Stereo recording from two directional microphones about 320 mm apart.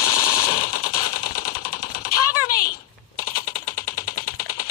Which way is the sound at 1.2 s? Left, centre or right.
Left.